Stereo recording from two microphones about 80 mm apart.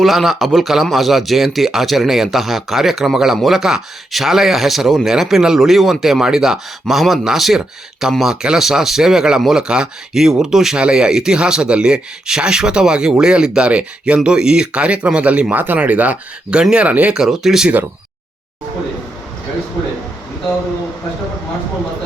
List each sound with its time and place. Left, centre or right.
0.0 s speech: centre